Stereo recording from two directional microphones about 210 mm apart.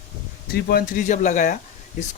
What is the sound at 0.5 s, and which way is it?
Speech, 45° left (ahead or behind).